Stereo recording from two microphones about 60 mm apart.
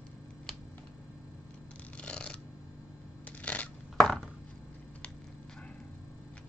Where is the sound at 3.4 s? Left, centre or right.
Left.